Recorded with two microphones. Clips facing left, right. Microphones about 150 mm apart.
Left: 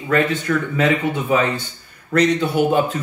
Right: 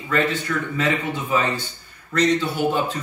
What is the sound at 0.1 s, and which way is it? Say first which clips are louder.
Speech: left 4 dB; 60° left (ahead or behind).